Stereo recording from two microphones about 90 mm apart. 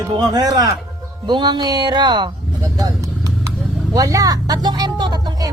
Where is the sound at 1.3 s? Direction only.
55° right (ahead or behind).